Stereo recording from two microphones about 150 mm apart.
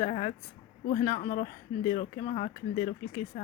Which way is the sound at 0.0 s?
40° left (ahead or behind).